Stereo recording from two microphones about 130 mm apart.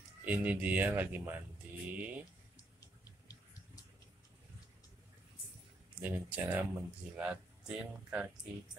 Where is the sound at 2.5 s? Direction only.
30° left (ahead or behind).